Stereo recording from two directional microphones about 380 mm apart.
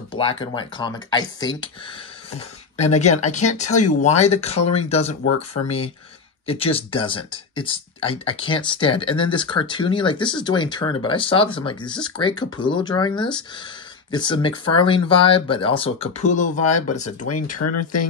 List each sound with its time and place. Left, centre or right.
0.1 s speech: centre
17.5 s speech: left